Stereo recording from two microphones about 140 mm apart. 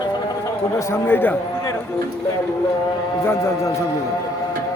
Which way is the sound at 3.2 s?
20° left (ahead or behind).